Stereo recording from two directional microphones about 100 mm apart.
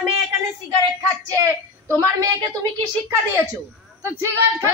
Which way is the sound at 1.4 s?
35° right (ahead or behind).